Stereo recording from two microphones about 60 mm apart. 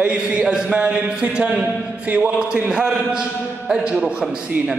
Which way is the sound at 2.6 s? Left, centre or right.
Centre.